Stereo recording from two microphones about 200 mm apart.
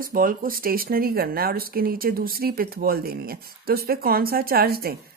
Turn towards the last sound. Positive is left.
turn(degrees=-50)  # may be behind; listen again after turning